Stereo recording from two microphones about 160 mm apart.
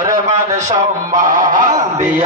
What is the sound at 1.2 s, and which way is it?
Honk, 55° right (ahead or behind).